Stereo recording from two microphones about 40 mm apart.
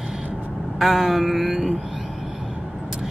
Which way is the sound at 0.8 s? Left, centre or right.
Centre.